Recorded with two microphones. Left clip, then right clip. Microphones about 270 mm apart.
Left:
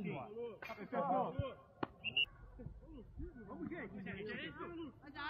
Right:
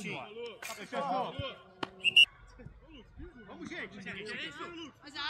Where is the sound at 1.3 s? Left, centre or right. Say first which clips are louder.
Right 5 dB; right.